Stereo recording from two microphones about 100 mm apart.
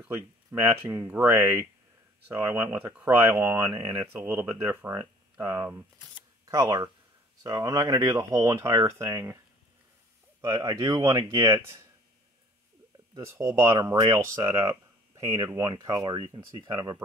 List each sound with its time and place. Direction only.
0.1 s speech: 25° right (ahead or behind)
6.4 s a sound: 35° right (ahead or behind)
7.4 s speech: 40° right (ahead or behind)
10.4 s speech: 40° right (ahead or behind)
13.3 s speech: 30° right (ahead or behind)